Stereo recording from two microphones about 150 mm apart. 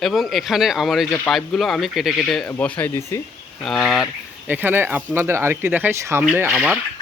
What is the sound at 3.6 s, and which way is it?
Speech, centre (ahead or behind).